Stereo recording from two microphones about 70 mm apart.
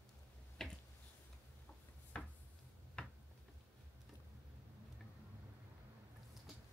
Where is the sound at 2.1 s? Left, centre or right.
Centre.